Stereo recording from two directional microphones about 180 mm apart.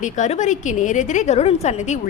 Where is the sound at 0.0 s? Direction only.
45° left (ahead or behind).